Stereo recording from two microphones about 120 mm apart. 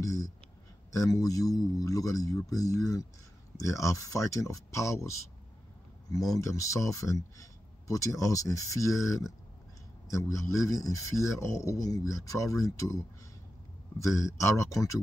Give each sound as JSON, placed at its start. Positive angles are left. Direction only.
{"t": 0.0, "sound": "a sound", "side_deg": 30}
{"t": 0.9, "sound": "speech", "side_deg": 30}
{"t": 10.3, "sound": "speech", "side_deg": 25}
{"t": 14.4, "sound": "speech", "side_deg": 25}